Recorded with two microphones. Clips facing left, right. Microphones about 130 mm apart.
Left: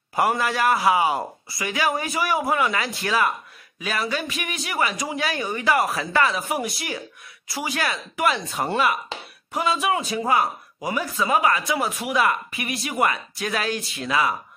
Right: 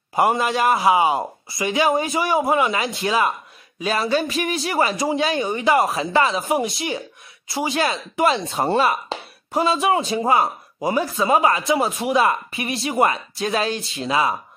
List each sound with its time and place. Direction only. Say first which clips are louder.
0.1 s speech: right 3 dB; 20° right (ahead or behind)